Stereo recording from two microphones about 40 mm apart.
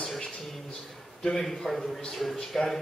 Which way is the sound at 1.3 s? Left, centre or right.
Centre.